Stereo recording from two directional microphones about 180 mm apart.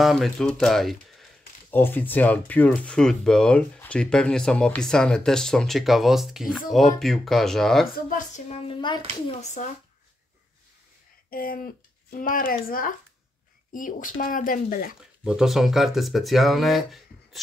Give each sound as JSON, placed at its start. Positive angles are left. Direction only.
{"t": 0.0, "sound": "speech", "side_deg": 0}
{"t": 8.5, "sound": "a child's voice", "side_deg": 25}
{"t": 9.4, "sound": "speech", "side_deg": 40}
{"t": 11.2, "sound": "speech", "side_deg": 55}
{"t": 15.0, "sound": "speech", "side_deg": -5}